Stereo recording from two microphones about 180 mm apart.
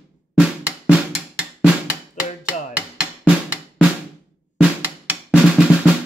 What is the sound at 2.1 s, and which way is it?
Music, 45° left (ahead or behind).